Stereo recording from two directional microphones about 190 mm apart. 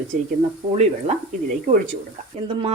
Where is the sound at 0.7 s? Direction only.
35° right (ahead or behind).